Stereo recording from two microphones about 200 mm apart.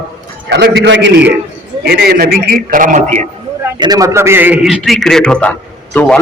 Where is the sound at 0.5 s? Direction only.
55° right (ahead or behind); by 3.2 s 35° right (ahead or behind).